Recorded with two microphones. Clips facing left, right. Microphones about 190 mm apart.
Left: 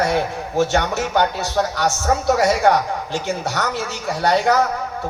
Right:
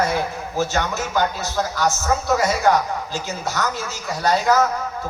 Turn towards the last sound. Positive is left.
turn(degrees=65)  # may be behind; listen again after turning